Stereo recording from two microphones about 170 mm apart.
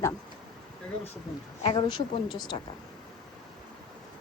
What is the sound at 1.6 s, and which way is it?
Speech, 35° left (ahead or behind).